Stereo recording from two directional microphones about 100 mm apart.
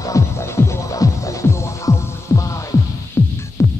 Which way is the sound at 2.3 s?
30° left (ahead or behind).